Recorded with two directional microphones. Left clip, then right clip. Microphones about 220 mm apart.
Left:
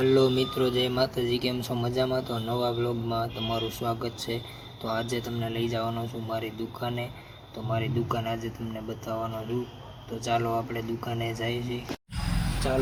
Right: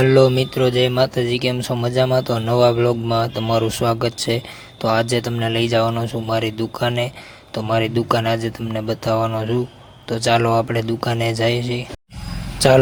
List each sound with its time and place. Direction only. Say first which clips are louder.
0.0 s speech: right 9 dB; 45° right (ahead or behind)